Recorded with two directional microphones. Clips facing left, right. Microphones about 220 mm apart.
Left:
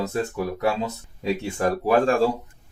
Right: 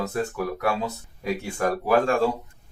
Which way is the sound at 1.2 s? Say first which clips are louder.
Left 2 dB; 25° left (ahead or behind).